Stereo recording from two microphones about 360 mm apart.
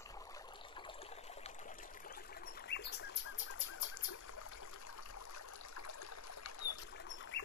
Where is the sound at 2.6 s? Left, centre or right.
Left.